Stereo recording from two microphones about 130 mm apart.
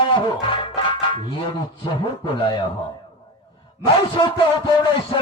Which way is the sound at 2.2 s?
35° left (ahead or behind).